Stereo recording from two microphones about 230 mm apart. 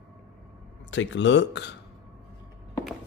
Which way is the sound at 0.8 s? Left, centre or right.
Left.